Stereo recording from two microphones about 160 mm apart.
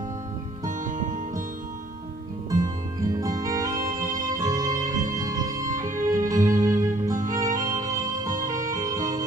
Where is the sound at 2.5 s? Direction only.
25° right (ahead or behind).